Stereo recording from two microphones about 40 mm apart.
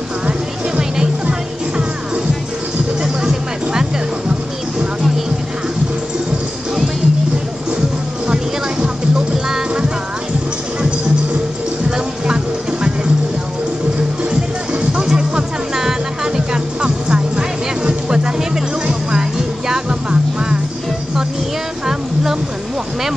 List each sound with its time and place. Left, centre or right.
0.3 s music: centre
3.0 s music: centre
8.3 s music: right
15.0 s music: centre
21.8 s music: centre